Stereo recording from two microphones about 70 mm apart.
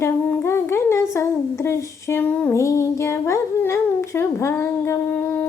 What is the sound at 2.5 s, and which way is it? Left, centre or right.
Speech, left.